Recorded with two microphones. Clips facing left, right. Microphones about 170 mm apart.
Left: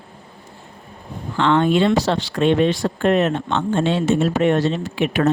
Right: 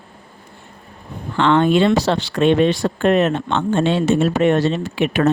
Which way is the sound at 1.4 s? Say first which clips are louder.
Right 2 dB; 70° right (ahead or behind).